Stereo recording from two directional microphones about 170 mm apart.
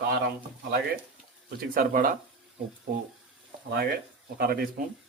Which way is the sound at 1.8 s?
55° right (ahead or behind).